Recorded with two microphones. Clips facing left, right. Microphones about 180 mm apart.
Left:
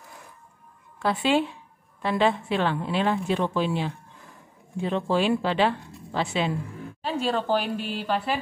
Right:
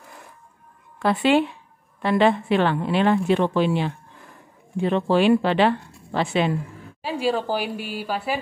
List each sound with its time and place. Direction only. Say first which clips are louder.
0.9 s a woman's voice: right 4 dB; 65° right (ahead or behind)
7.0 s a woman's voice: right 3 dB; 10° right (ahead or behind)